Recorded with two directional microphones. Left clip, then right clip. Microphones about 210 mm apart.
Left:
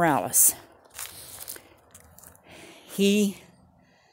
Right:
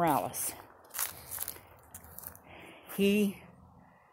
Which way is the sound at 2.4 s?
40° left (ahead or behind).